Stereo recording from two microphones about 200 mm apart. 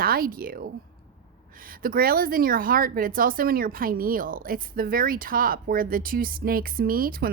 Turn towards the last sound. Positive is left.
turn(degrees=-45)  # may be behind; listen again after turning